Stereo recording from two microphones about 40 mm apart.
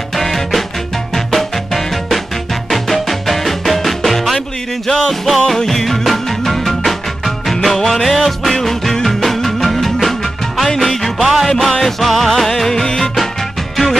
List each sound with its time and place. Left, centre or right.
0.1 s music: centre